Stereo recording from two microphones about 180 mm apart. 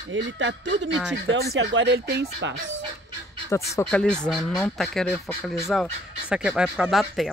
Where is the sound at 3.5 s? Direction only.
15° left (ahead or behind).